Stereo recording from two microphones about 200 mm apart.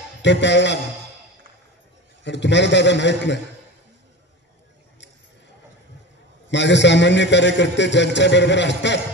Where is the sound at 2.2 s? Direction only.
60° left (ahead or behind).